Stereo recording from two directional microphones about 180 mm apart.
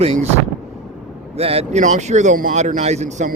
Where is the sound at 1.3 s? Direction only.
35° right (ahead or behind).